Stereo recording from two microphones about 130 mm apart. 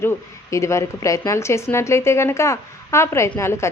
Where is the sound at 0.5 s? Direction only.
20° left (ahead or behind).